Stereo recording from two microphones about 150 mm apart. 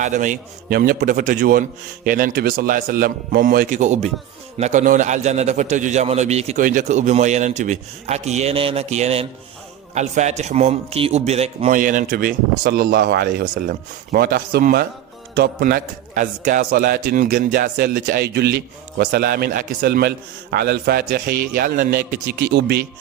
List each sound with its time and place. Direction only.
0.0 s a man's voice: 55° right (ahead or behind)
11.8 s a man's voice: 65° right (ahead or behind); by 15.8 s 90° right
16.1 s a man's voice: 55° right (ahead or behind); by 22.0 s 80° right